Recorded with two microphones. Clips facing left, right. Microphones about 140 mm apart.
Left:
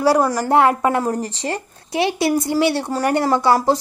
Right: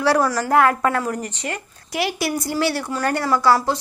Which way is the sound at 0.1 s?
15° left (ahead or behind).